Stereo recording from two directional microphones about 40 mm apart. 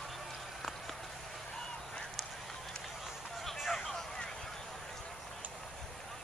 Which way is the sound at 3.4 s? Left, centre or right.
Centre.